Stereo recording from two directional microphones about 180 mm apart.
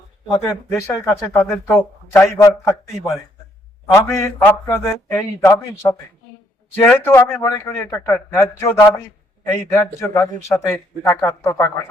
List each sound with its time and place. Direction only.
0.4 s speech: 15° left (ahead or behind)
3.9 s speech: 15° left (ahead or behind)